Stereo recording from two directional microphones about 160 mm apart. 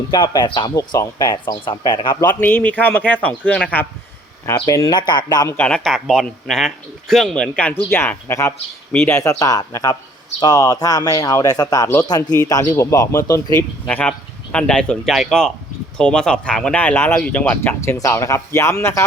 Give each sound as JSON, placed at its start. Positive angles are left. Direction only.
{"t": 0.1, "sound": "speech", "side_deg": 30}
{"t": 2.4, "sound": "speech", "side_deg": 10}
{"t": 4.4, "sound": "speech", "side_deg": 20}
{"t": 5.5, "sound": "speech", "side_deg": 5}
{"t": 13.8, "sound": "speech", "side_deg": 5}